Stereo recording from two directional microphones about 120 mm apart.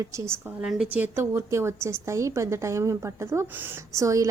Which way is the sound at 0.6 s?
5° right (ahead or behind).